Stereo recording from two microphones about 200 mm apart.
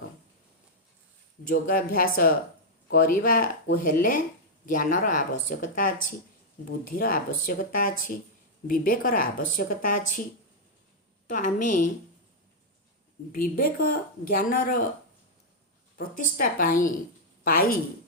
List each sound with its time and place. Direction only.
1.5 s speech: 45° left (ahead or behind)
11.3 s speech: 40° left (ahead or behind)
13.3 s speech: 45° left (ahead or behind)
16.0 s a woman's voice: 45° left (ahead or behind)